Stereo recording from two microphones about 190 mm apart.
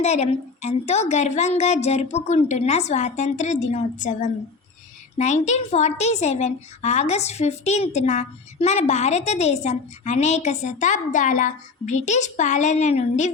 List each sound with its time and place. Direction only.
0.0 s a woman's voice: 35° left (ahead or behind)